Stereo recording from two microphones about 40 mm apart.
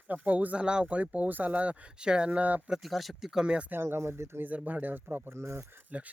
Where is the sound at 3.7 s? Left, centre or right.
Right.